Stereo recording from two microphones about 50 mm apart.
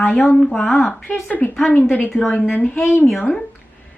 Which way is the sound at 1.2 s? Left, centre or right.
Left.